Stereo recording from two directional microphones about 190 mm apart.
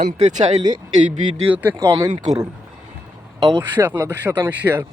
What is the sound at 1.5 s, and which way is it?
Speech, 10° right (ahead or behind).